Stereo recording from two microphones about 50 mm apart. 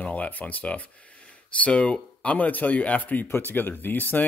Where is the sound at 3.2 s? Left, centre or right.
Left.